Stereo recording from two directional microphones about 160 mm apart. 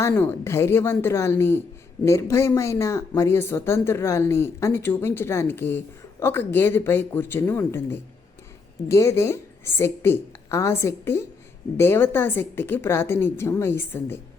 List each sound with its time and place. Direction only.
0.1 s speech: 15° left (ahead or behind)